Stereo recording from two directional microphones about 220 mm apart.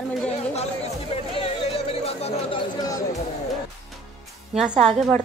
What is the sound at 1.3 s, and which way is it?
Music, 25° left (ahead or behind).